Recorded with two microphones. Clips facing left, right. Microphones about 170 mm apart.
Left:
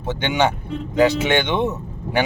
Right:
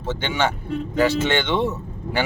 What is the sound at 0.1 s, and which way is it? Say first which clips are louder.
Speech: left 3 dB; 15° left (ahead or behind).